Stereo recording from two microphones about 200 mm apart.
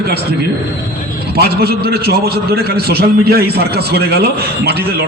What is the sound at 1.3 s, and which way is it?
A man's voice, 50° right (ahead or behind).